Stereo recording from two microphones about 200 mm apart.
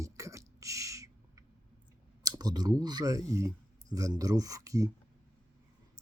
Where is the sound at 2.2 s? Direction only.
20° right (ahead or behind).